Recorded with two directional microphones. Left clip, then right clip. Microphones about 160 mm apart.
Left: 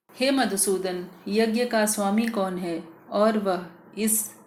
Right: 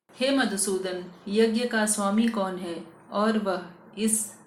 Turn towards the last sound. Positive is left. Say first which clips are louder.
# left 1 dB
turn(degrees=40)  # may be behind; listen again after turning